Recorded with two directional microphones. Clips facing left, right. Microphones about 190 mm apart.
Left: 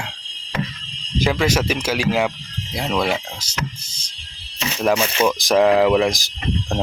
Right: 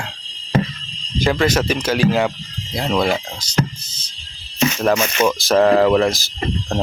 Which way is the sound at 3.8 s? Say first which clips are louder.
Right 2 dB; 10° left (ahead or behind).